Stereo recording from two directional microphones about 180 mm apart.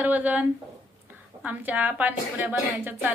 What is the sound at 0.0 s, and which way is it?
A woman's voice, 10° right (ahead or behind).